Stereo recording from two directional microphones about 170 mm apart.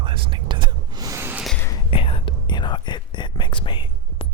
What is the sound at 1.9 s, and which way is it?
Whispering, 30° left (ahead or behind).